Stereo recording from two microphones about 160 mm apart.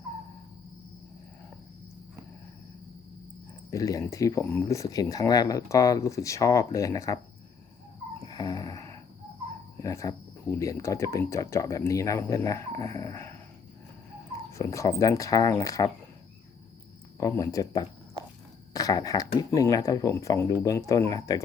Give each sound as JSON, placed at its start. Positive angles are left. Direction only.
{"t": 3.7, "sound": "speech", "side_deg": 20}
{"t": 8.2, "sound": "snoring", "side_deg": 25}
{"t": 9.7, "sound": "speech", "side_deg": 20}
{"t": 14.5, "sound": "speech", "side_deg": 20}
{"t": 17.2, "sound": "speech", "side_deg": 20}